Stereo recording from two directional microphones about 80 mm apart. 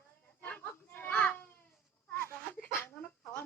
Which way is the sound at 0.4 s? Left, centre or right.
Left.